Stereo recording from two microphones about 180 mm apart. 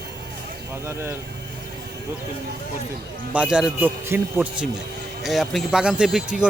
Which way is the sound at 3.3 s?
5° right (ahead or behind).